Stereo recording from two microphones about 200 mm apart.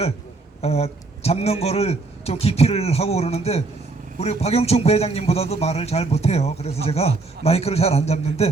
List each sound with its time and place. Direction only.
0.6 s a man's voice: 30° left (ahead or behind)